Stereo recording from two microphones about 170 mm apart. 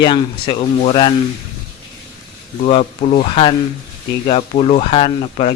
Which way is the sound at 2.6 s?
40° left (ahead or behind).